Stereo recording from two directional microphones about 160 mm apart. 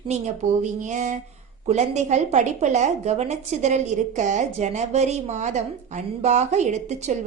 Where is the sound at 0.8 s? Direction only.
50° right (ahead or behind).